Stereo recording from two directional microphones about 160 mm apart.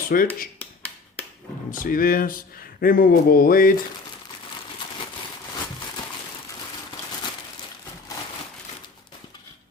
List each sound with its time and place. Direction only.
0.1 s speech: 65° left (ahead or behind)
1.7 s speech: 60° left (ahead or behind)